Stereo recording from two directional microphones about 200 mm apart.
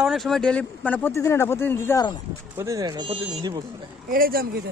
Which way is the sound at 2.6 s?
15° right (ahead or behind).